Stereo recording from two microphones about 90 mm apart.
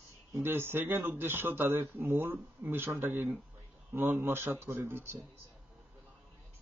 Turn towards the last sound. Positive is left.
turn(degrees=-25)  # may be behind; listen again after turning